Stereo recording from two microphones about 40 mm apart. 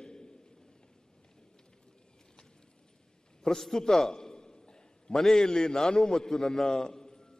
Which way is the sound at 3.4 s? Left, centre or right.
Centre.